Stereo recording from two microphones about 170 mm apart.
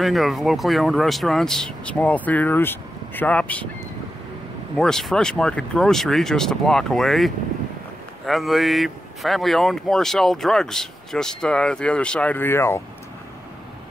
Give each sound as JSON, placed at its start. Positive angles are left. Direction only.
{"t": 0.0, "sound": "speech", "side_deg": 0}
{"t": 4.7, "sound": "speech", "side_deg": 5}